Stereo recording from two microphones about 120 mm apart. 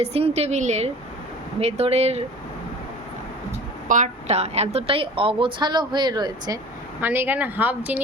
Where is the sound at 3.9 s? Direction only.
75° right (ahead or behind); by 6.5 s 35° right (ahead or behind).